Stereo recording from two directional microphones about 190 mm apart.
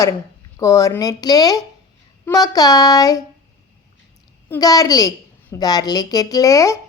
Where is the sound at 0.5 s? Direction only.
15° left (ahead or behind).